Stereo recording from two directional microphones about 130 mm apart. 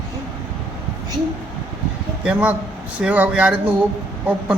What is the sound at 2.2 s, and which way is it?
A man's voice, 10° right (ahead or behind).